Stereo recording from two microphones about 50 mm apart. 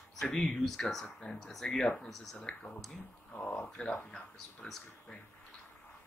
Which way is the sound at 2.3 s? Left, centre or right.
Centre.